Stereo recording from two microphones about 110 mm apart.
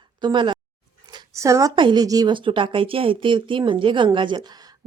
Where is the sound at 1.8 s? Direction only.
45° right (ahead or behind).